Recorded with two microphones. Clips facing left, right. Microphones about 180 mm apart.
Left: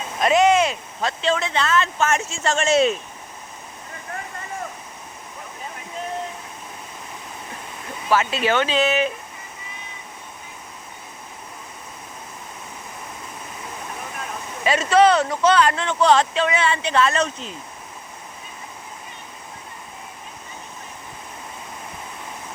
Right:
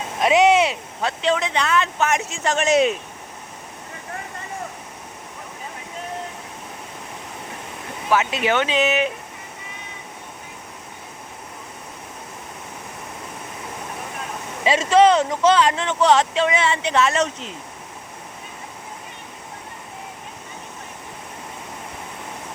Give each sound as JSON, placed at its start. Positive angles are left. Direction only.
{"t": 0.2, "sound": "speech", "side_deg": -10}
{"t": 8.1, "sound": "speech", "side_deg": -15}
{"t": 14.6, "sound": "speech", "side_deg": -25}